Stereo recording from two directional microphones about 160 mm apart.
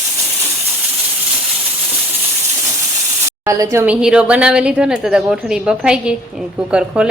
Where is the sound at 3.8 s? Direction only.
5° right (ahead or behind).